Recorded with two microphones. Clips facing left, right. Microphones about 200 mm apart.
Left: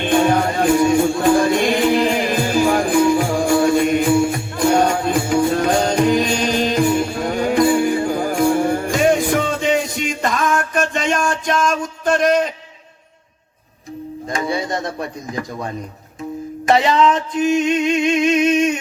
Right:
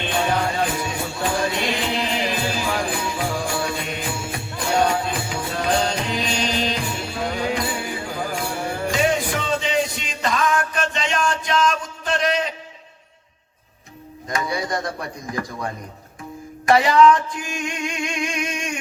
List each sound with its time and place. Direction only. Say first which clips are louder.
0.0 s music: left 7 dB; 50° left (ahead or behind)
14.3 s a sound: left 3 dB; 25° left (ahead or behind)
16.6 s music: even; 25° left (ahead or behind)